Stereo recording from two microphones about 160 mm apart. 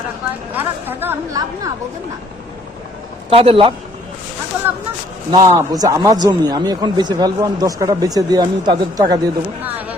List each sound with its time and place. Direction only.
0.5 s a woman's voice: 15° right (ahead or behind)
3.3 s a man's voice: 35° right (ahead or behind)
5.3 s a man's voice: 25° right (ahead or behind)